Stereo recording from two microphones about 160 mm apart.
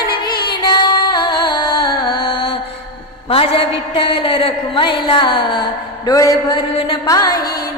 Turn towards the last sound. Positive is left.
turn(degrees=25)  # may be behind; listen again after turning